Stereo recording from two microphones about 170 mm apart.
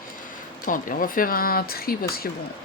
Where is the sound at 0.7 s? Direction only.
55° left (ahead or behind).